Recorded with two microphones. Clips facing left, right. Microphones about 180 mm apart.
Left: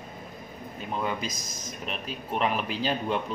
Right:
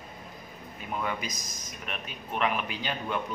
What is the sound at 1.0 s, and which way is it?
Speech, 30° left (ahead or behind).